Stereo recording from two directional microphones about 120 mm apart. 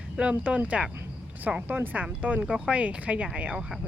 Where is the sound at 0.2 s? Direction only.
10° right (ahead or behind).